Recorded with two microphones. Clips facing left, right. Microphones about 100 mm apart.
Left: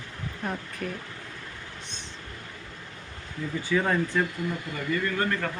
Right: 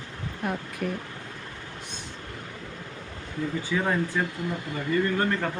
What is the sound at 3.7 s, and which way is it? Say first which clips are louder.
Speech: left 3 dB; 15° right (ahead or behind).